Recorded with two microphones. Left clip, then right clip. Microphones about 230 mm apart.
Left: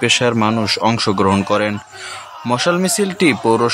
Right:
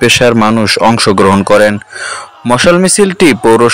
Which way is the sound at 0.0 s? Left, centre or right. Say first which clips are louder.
Right 8 dB; right.